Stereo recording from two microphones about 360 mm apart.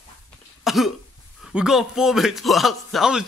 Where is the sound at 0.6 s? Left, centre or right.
Centre.